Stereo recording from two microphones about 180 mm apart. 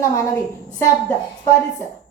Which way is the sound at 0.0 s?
15° left (ahead or behind).